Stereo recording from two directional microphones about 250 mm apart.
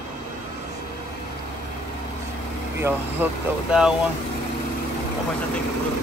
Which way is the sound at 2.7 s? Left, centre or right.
Centre.